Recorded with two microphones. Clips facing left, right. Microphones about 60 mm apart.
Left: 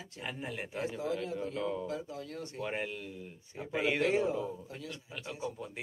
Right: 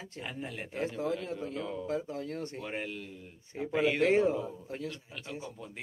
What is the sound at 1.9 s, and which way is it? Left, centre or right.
Speech, right.